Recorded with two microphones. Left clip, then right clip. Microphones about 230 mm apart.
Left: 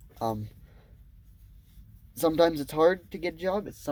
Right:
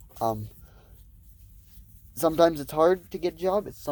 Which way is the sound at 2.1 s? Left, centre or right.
Right.